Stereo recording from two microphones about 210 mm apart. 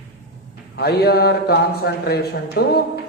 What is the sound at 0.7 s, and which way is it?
A man's voice, 50° left (ahead or behind).